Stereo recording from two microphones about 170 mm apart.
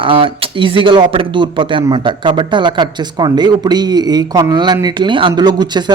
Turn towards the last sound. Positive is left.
turn(degrees=-25)  # may be behind; listen again after turning